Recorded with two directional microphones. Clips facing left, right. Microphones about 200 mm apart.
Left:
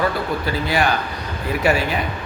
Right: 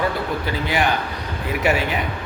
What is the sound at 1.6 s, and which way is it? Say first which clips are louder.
Speech: left 1 dB; 20° right (ahead or behind).